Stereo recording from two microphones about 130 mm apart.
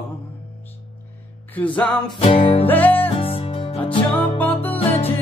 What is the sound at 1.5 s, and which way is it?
Music, 10° left (ahead or behind).